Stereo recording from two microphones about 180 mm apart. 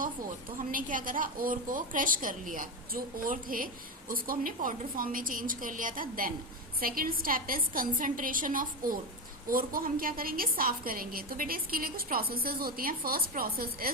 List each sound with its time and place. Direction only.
0.0 s a woman's voice: 50° right (ahead or behind)